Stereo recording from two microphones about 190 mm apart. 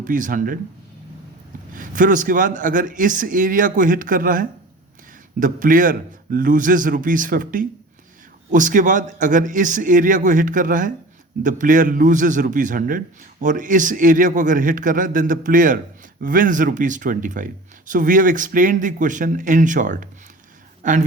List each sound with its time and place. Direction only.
0.0 s speech: 45° right (ahead or behind)
1.7 s speech: 45° right (ahead or behind)